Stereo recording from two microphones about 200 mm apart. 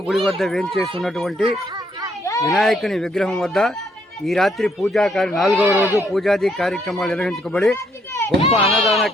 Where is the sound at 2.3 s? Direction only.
15° left (ahead or behind).